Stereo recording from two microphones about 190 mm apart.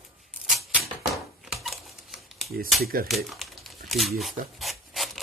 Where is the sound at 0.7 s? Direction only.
Centre (ahead or behind).